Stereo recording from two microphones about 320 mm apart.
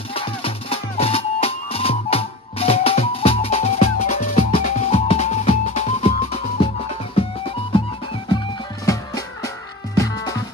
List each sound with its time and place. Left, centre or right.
0.1 s music: centre
7.7 s music: centre